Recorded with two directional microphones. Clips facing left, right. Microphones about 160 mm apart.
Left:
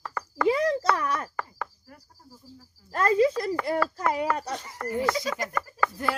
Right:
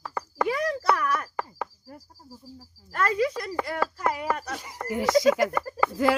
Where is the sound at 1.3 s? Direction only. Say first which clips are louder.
Right 2 dB; 15° right (ahead or behind).